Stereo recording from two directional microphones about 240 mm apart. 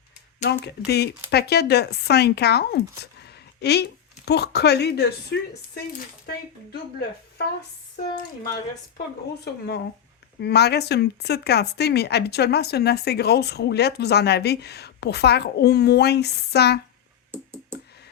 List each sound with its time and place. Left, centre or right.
0.4 s speech: left
8.1 s speech: centre
9.4 s speech: left
17.3 s a sound: centre